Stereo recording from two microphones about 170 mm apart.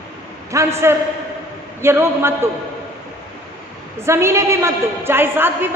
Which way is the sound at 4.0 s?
15° right (ahead or behind).